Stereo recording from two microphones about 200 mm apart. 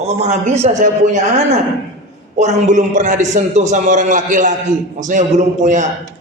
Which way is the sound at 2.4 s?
35° right (ahead or behind).